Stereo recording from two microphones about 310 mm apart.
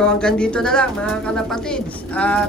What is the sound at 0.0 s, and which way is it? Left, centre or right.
Speech, centre.